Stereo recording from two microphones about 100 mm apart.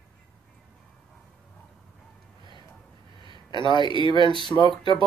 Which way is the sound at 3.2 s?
50° left (ahead or behind).